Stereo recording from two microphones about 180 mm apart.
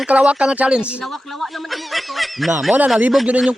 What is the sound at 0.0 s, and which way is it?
Speech, 5° right (ahead or behind).